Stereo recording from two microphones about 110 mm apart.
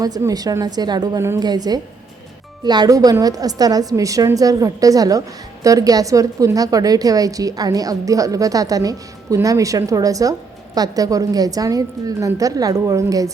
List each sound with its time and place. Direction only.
0.2 s a woman's voice: 35° right (ahead or behind)